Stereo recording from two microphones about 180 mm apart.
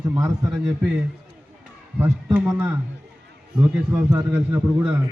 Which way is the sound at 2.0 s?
5° right (ahead or behind).